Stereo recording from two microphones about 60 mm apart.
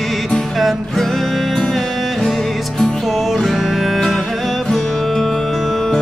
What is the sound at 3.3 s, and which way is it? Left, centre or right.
Music, centre.